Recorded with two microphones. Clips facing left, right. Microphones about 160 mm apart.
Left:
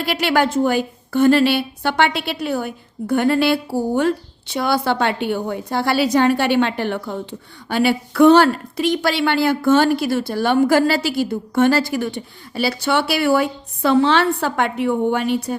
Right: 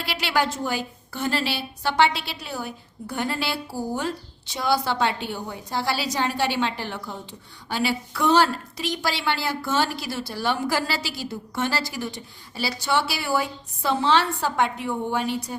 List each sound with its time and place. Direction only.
0.0 s a woman's voice: 50° left (ahead or behind)